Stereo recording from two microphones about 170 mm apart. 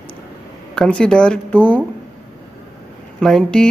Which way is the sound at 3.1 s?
5° left (ahead or behind).